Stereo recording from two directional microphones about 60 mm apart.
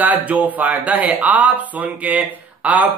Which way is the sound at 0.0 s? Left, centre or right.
Right.